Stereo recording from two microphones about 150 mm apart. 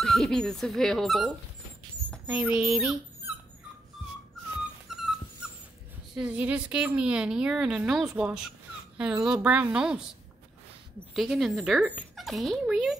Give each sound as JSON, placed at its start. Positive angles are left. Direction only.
{"t": 0.0, "sound": "speech", "side_deg": 0}
{"t": 2.2, "sound": "a woman's voice", "side_deg": -10}
{"t": 4.8, "sound": "dog", "side_deg": -5}
{"t": 6.1, "sound": "a woman's voice", "side_deg": -10}